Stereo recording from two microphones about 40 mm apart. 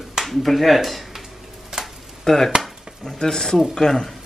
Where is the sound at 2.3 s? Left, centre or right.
Centre.